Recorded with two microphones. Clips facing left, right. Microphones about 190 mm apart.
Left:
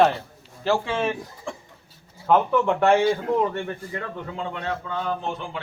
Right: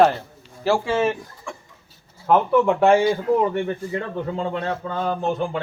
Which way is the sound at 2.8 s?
5° right (ahead or behind).